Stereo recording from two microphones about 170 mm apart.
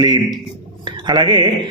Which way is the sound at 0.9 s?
25° right (ahead or behind).